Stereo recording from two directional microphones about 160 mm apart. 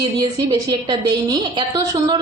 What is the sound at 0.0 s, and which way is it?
A woman's voice, 25° right (ahead or behind).